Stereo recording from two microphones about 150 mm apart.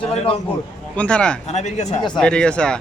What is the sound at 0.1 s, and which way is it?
Speech, 45° left (ahead or behind).